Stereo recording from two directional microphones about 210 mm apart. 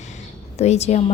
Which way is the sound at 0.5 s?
30° left (ahead or behind).